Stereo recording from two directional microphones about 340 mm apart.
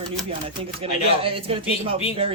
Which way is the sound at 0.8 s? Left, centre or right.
Centre.